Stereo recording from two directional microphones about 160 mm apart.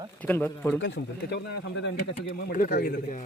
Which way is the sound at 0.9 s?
90° left.